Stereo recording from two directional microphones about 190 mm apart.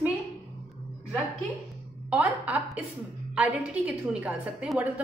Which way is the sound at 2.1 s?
10° right (ahead or behind).